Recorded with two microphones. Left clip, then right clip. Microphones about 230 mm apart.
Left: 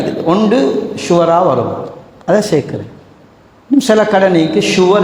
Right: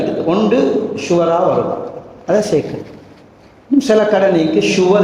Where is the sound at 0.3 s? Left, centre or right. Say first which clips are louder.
Left 3 dB; left.